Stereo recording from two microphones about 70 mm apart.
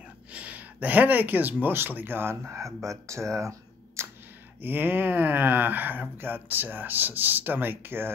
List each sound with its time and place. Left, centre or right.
0.3 s speech: right
4.6 s speech: right